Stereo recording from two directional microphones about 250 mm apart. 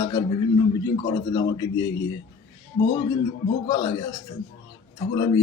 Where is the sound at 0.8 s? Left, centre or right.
Centre.